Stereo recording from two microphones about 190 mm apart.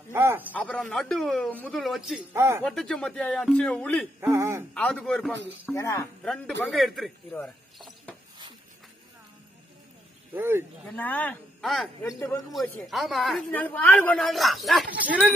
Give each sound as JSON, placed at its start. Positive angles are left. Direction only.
{"t": 0.1, "sound": "speech", "side_deg": -10}
{"t": 0.5, "sound": "a woman's voice", "side_deg": 5}
{"t": 2.3, "sound": "speech", "side_deg": -15}
{"t": 2.6, "sound": "a woman's voice", "side_deg": 5}
{"t": 4.2, "sound": "speech", "side_deg": -15}
{"t": 4.7, "sound": "a woman's voice", "side_deg": 5}
{"t": 6.2, "sound": "a woman's voice", "side_deg": 5}
{"t": 7.4, "sound": "a sound", "side_deg": 5}
{"t": 10.3, "sound": "speech", "side_deg": -10}
{"t": 11.0, "sound": "speech", "side_deg": 10}
{"t": 12.0, "sound": "speech", "side_deg": 15}
{"t": 12.5, "sound": "a woman's voice", "side_deg": 5}